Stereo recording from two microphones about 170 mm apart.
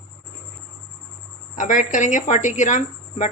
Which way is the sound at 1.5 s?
50° left (ahead or behind).